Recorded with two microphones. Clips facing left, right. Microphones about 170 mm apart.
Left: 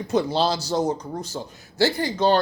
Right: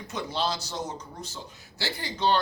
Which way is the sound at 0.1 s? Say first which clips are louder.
Left 9 dB; 35° left (ahead or behind).